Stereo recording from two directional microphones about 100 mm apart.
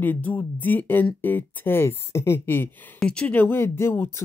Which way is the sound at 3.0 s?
10° left (ahead or behind).